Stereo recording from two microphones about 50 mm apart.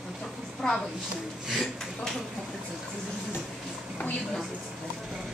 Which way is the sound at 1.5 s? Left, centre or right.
Centre.